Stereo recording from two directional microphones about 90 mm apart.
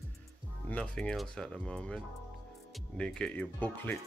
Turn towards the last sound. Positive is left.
turn(degrees=20)  # may be behind; listen again after turning